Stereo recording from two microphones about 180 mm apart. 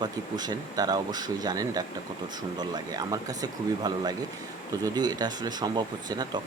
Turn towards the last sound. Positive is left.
turn(degrees=-20)  # may be behind; listen again after turning